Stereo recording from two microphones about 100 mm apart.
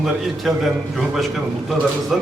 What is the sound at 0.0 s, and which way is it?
A man's voice, centre (ahead or behind).